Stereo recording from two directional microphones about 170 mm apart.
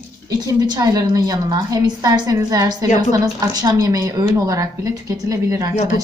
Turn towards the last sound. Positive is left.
turn(degrees=-20)  # may be behind; listen again after turning